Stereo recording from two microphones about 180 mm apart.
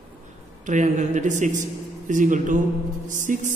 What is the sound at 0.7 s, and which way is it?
A man's voice, 40° right (ahead or behind).